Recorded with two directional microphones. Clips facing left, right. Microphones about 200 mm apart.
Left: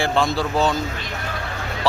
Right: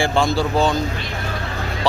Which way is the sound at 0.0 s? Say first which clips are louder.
Right 2 dB; centre (ahead or behind).